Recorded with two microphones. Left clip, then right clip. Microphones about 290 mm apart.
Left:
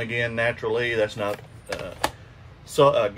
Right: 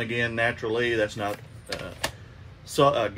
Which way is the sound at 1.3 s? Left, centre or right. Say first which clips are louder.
Left 3 dB; left.